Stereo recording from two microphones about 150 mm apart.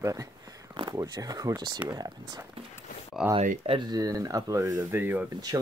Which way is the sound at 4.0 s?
25° right (ahead or behind).